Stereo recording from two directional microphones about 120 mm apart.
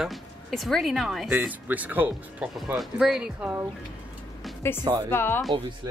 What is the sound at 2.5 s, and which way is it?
Speech, centre (ahead or behind).